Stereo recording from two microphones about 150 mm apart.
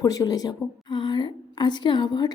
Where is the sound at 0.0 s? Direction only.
25° left (ahead or behind).